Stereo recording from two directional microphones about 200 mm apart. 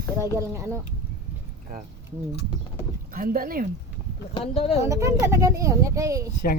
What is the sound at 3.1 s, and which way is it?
Speech, 45° right (ahead or behind).